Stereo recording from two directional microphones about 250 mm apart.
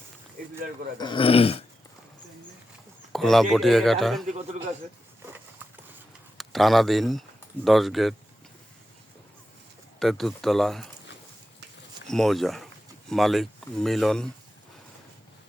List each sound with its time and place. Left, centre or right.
0.9 s speech: centre
3.1 s a man's voice: centre
6.3 s speech: centre
10.0 s a man's voice: centre
12.0 s a man's voice: centre